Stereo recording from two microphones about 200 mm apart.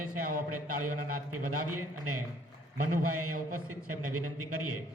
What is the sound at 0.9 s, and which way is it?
Speech, 45° right (ahead or behind).